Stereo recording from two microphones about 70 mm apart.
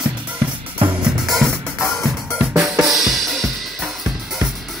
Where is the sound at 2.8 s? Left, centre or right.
Centre.